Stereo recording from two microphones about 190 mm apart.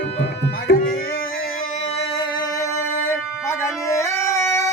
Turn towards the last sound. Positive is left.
turn(degrees=15)  # may be behind; listen again after turning